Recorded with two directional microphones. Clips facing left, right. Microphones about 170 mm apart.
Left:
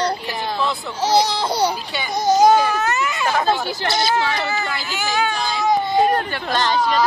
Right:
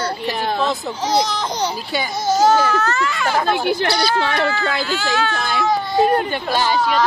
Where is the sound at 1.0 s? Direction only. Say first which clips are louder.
Left 3 dB; 10° left (ahead or behind).